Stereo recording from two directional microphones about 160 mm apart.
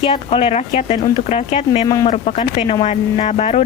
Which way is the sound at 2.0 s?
45° left (ahead or behind).